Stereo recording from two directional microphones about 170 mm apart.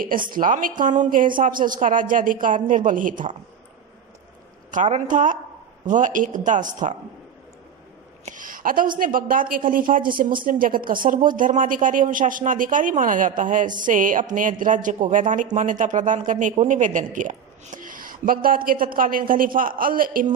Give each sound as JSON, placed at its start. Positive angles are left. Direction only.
{"t": 0.0, "sound": "speech", "side_deg": -55}
{"t": 4.7, "sound": "speech", "side_deg": -45}
{"t": 8.2, "sound": "speech", "side_deg": -50}